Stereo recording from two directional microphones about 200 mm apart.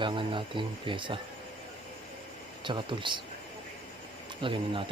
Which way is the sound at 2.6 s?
25° right (ahead or behind).